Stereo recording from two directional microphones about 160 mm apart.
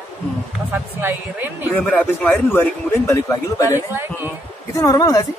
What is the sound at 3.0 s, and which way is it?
Speech, 20° left (ahead or behind).